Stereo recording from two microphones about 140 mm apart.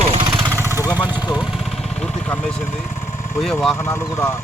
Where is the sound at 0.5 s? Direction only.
20° right (ahead or behind).